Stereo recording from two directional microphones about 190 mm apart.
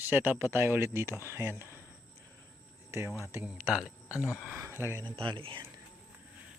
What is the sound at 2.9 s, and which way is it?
Speech, 15° right (ahead or behind).